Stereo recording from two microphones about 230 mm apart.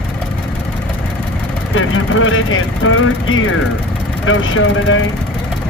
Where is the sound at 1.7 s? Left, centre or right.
Left.